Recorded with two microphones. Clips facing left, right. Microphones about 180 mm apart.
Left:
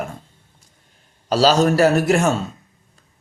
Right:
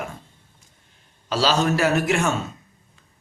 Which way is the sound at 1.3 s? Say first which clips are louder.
Left 6 dB; 40° left (ahead or behind).